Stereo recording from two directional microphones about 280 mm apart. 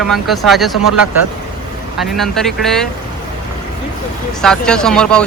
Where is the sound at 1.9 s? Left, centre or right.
Centre.